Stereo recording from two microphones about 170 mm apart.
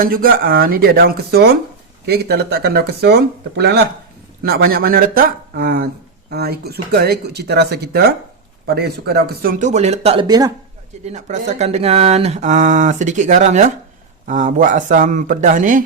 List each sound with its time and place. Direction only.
0.0 s speech: 60° right (ahead or behind)
9.6 s speech: 45° right (ahead or behind)
10.2 s speech: 25° right (ahead or behind)
11.0 s speech: 45° right (ahead or behind)